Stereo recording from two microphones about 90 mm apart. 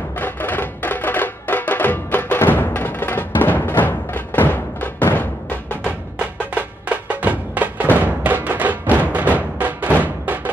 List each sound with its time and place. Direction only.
0.2 s music: 20° left (ahead or behind)
6.5 s music: 15° right (ahead or behind)